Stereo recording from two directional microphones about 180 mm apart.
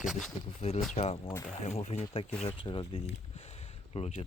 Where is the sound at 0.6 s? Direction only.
35° left (ahead or behind).